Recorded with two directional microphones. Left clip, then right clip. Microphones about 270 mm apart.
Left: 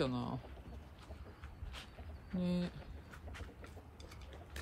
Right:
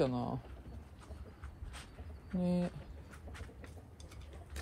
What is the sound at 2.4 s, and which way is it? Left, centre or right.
Speech, centre.